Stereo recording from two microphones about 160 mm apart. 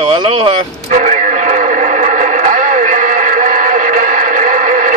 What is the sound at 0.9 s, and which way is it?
Radio, 50° right (ahead or behind).